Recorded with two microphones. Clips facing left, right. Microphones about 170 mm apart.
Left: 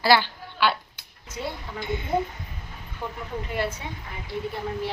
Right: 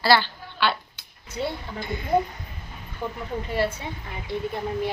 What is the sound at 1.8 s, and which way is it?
Speech, 20° left (ahead or behind).